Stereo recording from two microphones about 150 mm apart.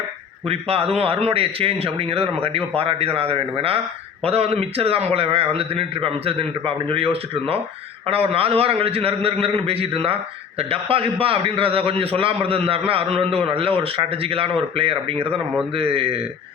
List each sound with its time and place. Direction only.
0.4 s a man's voice: 40° right (ahead or behind)